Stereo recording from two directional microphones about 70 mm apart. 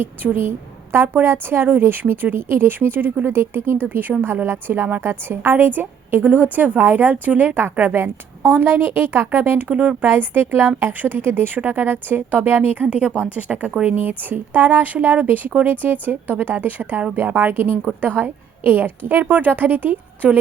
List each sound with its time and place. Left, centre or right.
0.0 s a woman's voice: right